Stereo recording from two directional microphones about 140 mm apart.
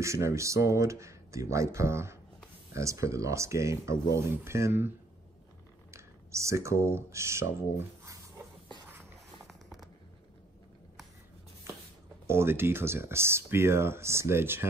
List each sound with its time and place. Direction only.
0.0 s speech: 20° right (ahead or behind)
5.9 s speech: 20° right (ahead or behind)
9.5 s zipper: centre (ahead or behind)
11.7 s a sound: 20° right (ahead or behind)
12.3 s speech: 15° right (ahead or behind)